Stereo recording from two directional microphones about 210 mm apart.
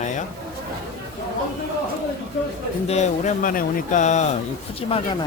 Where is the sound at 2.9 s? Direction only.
35° left (ahead or behind).